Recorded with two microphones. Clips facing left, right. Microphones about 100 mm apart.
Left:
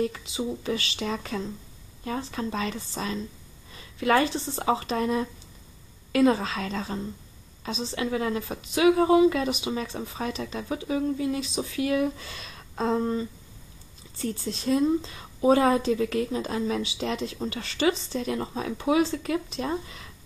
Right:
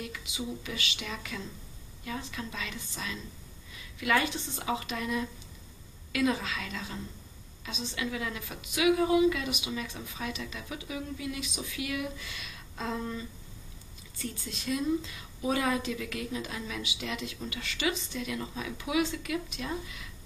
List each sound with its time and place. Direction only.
0.0 s a woman's voice: 35° left (ahead or behind)